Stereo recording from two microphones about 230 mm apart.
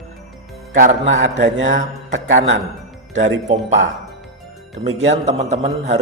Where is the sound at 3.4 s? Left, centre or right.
Right.